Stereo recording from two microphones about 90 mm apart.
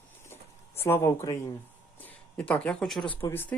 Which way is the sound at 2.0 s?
15° left (ahead or behind).